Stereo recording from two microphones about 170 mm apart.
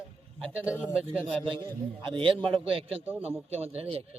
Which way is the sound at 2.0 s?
30° right (ahead or behind).